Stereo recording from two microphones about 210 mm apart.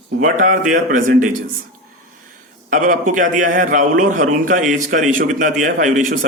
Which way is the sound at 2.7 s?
40° right (ahead or behind).